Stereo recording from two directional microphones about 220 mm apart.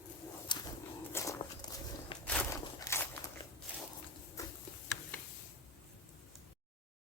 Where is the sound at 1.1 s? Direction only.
15° left (ahead or behind).